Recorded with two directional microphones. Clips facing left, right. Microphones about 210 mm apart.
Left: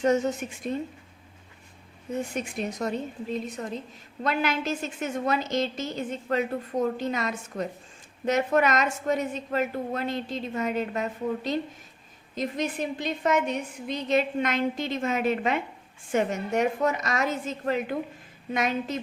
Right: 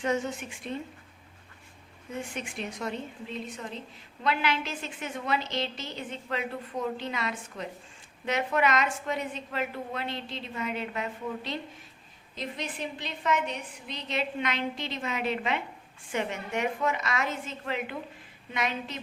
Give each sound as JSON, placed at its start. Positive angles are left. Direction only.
{"t": 0.0, "sound": "a woman's voice", "side_deg": 40}
{"t": 2.3, "sound": "a woman's voice", "side_deg": 40}